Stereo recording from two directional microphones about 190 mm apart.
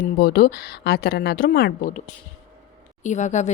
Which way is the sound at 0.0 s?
55° left (ahead or behind).